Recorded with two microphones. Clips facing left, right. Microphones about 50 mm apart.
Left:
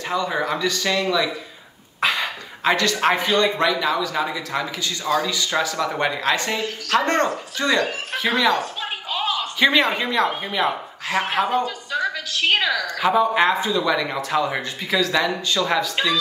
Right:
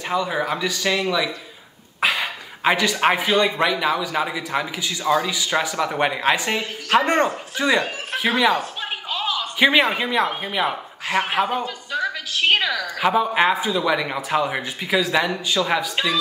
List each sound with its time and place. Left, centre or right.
0.1 s speech: centre
2.0 s a sound: centre
3.0 s a man's voice: centre